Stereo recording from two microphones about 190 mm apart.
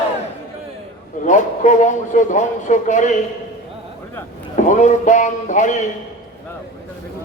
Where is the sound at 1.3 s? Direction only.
40° left (ahead or behind).